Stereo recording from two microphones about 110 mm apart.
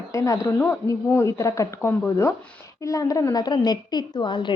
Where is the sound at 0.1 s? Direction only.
30° left (ahead or behind).